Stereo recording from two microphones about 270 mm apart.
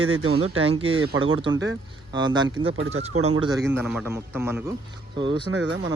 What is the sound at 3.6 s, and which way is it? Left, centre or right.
Speech, centre.